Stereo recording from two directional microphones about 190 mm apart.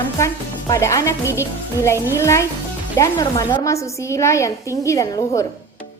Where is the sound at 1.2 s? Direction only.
10° right (ahead or behind).